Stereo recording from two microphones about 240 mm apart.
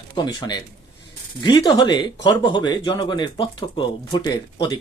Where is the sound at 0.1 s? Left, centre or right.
Centre.